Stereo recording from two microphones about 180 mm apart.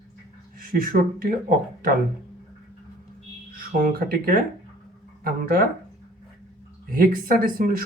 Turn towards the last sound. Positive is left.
turn(degrees=-55)  # may be behind; listen again after turning